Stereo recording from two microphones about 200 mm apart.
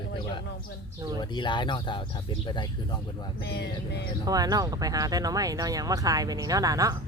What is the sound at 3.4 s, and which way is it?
Speech, 55° left (ahead or behind).